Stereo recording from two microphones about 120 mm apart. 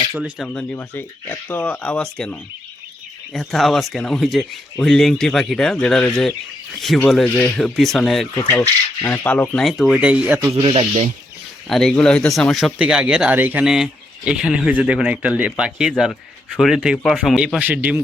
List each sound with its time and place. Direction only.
0.4 s speech: 10° left (ahead or behind)
8.4 s speech: 15° left (ahead or behind); by 10.3 s 10° right (ahead or behind)
10.5 s speech: 50° right (ahead or behind)
11.7 s speech: 5° left (ahead or behind); by 13.7 s 15° right (ahead or behind)
13.7 s speech: 5° right (ahead or behind)